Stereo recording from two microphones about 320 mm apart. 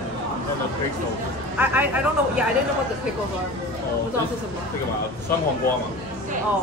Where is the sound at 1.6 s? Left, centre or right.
Centre.